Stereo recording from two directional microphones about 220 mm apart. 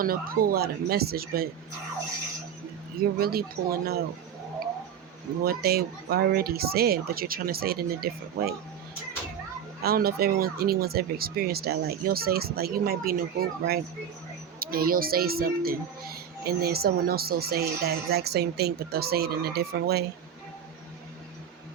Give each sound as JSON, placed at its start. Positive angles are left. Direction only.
{"t": 0.0, "sound": "speech", "side_deg": -40}
{"t": 3.0, "sound": "speech", "side_deg": -45}
{"t": 5.4, "sound": "speech", "side_deg": -45}
{"t": 9.8, "sound": "speech", "side_deg": -45}